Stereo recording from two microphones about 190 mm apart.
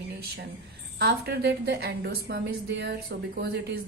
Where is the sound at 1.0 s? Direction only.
60° right (ahead or behind).